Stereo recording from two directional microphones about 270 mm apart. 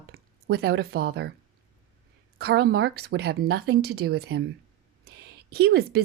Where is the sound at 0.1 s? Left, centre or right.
Right.